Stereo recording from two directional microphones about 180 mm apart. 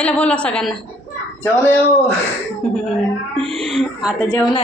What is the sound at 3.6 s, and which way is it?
Speech, centre (ahead or behind).